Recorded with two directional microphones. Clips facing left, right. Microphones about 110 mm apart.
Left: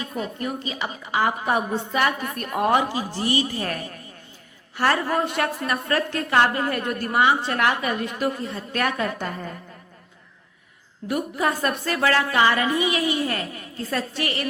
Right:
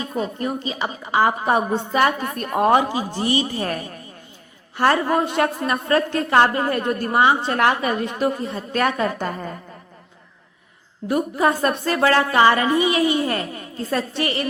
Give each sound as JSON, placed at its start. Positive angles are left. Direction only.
{"t": 0.1, "sound": "a woman's voice", "side_deg": -30}
{"t": 2.9, "sound": "a woman's voice", "side_deg": -20}
{"t": 4.8, "sound": "a woman's voice", "side_deg": -25}
{"t": 11.1, "sound": "a woman's voice", "side_deg": -30}